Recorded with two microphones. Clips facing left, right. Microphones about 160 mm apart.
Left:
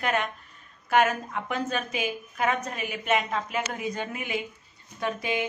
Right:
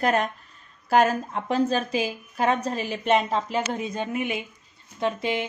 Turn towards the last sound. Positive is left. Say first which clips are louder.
# right 3 dB
turn(degrees=-25)  # may be behind; listen again after turning